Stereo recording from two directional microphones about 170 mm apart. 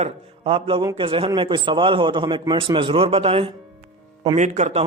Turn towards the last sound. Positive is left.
turn(degrees=-40)  # may be behind; listen again after turning